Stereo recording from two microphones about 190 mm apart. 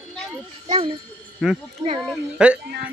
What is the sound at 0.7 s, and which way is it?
Speech, 30° right (ahead or behind).